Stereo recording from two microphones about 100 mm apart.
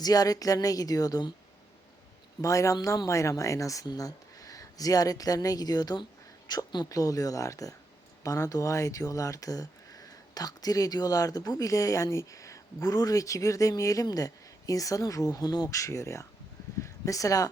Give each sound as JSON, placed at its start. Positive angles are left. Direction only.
{"t": 0.0, "sound": "speech", "side_deg": 40}
{"t": 2.4, "sound": "speech", "side_deg": 35}